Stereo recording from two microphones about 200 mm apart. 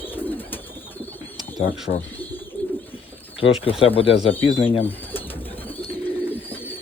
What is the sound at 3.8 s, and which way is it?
Speech, 25° left (ahead or behind).